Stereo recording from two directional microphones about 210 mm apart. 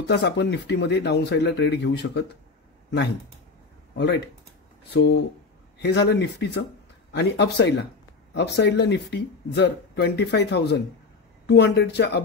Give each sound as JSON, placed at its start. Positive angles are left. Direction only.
{"t": 0.1, "sound": "speech", "side_deg": 55}